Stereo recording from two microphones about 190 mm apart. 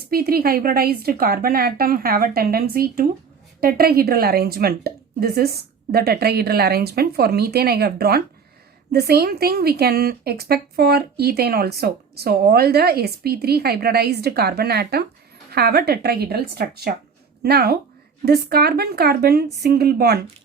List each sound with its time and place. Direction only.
0.1 s a woman's voice: 50° right (ahead or behind)